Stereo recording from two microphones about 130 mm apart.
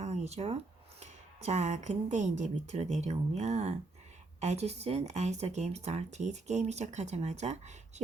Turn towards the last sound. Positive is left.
turn(degrees=-60)  # may be behind; listen again after turning